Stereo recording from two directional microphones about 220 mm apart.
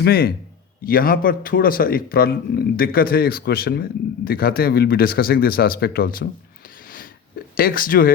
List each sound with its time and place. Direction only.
0.0 s speech: 45° left (ahead or behind)
7.5 s speech: 40° left (ahead or behind)